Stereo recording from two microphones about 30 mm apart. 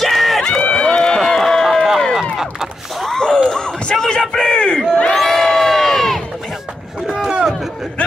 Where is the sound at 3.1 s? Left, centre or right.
Left.